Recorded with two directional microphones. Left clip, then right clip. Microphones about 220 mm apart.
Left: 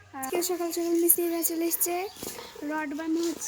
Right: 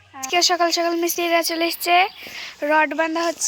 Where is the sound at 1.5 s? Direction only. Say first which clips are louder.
Right 8 dB; 70° right (ahead or behind).